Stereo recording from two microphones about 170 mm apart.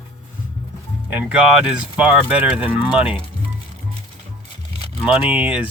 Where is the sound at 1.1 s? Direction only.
5° right (ahead or behind).